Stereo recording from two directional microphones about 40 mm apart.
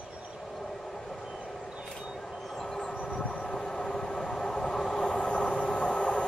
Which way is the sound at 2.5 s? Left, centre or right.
Centre.